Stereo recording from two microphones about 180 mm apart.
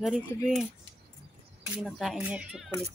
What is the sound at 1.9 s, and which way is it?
Speech, centre (ahead or behind).